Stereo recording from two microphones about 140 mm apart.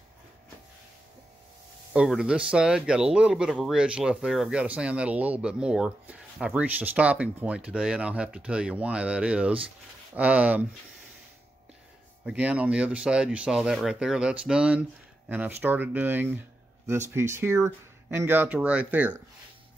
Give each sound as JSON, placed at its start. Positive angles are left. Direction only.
{"t": 2.0, "sound": "speech", "side_deg": -5}
{"t": 12.3, "sound": "speech", "side_deg": -10}